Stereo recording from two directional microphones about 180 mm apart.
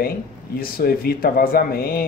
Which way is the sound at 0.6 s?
55° left (ahead or behind).